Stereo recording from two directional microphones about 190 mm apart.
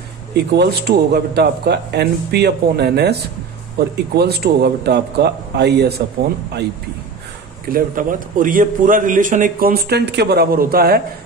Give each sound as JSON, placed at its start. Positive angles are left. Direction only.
{"t": 0.3, "sound": "a man's voice", "side_deg": -60}
{"t": 7.7, "sound": "a man's voice", "side_deg": -45}